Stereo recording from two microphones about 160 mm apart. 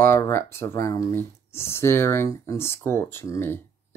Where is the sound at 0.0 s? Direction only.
15° left (ahead or behind).